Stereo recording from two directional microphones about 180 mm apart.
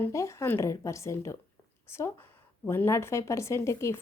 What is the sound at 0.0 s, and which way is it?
Speech, 15° left (ahead or behind).